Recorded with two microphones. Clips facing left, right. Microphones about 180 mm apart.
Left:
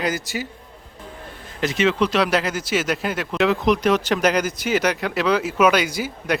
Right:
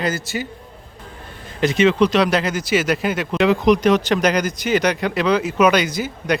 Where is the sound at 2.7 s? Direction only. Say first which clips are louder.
Right 4 dB; 5° right (ahead or behind).